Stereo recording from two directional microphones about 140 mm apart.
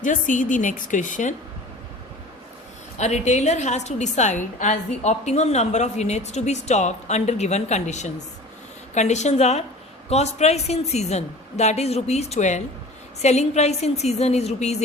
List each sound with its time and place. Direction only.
0.0 s a woman's voice: 65° left (ahead or behind)
3.0 s a woman's voice: 55° left (ahead or behind)